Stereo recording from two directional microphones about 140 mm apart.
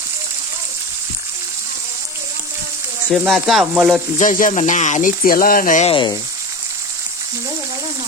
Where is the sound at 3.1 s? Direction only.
Centre (ahead or behind).